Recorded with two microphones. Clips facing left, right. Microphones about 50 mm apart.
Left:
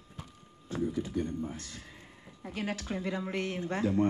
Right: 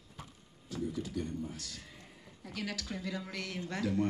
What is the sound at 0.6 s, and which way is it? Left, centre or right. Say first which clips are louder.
A man's voice: left 5 dB; left.